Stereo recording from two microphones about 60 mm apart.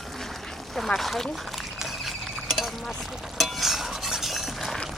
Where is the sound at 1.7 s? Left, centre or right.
Centre.